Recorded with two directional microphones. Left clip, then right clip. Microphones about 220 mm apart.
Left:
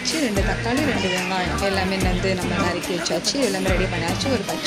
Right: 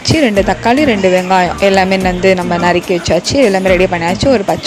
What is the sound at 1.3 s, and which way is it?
Speech, 35° right (ahead or behind).